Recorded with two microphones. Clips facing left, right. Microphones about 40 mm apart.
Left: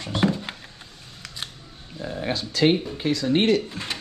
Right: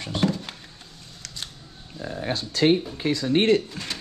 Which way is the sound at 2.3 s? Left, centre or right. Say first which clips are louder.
Even; left.